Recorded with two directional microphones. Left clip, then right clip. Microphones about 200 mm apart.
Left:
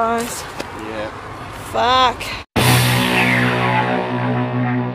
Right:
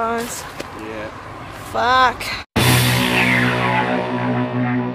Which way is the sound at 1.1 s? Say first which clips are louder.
Left 2 dB; 25° left (ahead or behind).